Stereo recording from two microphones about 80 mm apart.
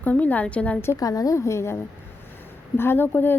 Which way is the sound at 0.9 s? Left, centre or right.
Left.